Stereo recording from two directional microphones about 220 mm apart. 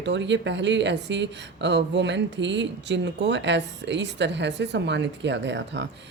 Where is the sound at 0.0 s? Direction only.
55° right (ahead or behind).